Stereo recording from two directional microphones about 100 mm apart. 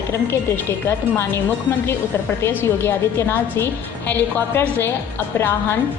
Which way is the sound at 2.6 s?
25° left (ahead or behind).